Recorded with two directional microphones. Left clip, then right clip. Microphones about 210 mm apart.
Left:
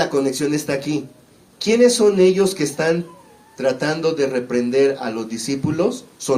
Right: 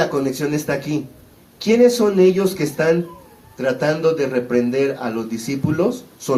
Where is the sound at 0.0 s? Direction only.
40° left (ahead or behind).